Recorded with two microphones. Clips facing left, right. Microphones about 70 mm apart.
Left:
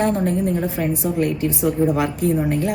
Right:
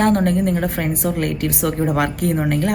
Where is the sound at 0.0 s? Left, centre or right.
Right.